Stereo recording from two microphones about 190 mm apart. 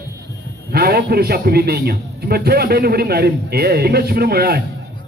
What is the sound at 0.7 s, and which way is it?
A man's voice, 55° right (ahead or behind).